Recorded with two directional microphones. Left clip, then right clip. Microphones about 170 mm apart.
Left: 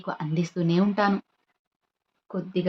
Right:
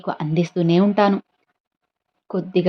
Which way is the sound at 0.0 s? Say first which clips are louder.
Right 7 dB; 40° right (ahead or behind).